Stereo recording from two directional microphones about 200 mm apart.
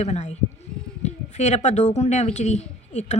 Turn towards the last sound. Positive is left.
turn(degrees=35)  # may be behind; listen again after turning